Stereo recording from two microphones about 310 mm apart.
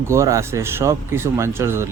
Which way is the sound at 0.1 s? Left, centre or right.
Centre.